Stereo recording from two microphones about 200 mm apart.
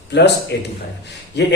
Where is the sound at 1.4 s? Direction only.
60° left (ahead or behind).